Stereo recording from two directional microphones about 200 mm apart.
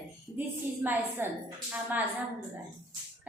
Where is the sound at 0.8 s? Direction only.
10° right (ahead or behind).